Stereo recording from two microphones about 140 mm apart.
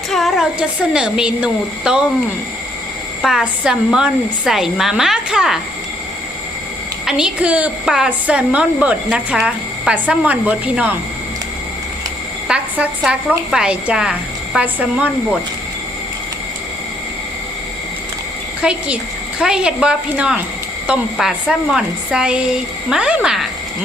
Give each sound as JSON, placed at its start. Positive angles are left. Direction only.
{"t": 0.1, "sound": "a woman's voice", "side_deg": 0}
{"t": 3.2, "sound": "a woman's voice", "side_deg": -5}
{"t": 7.0, "sound": "a woman's voice", "side_deg": -5}
{"t": 12.5, "sound": "a woman's voice", "side_deg": -10}
{"t": 18.6, "sound": "a woman's voice", "side_deg": -5}